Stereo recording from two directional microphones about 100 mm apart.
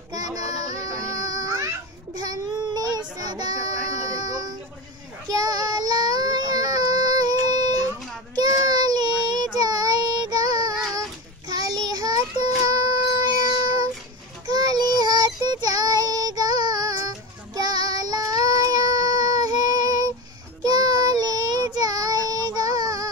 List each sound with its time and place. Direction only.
0.1 s child singing: 35° right (ahead or behind)